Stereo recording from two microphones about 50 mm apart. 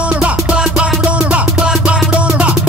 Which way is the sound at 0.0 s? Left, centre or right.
Right.